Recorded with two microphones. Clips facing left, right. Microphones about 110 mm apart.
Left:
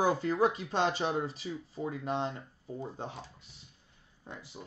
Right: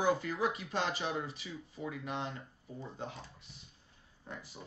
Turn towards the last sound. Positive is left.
turn(degrees=20)  # may be behind; listen again after turning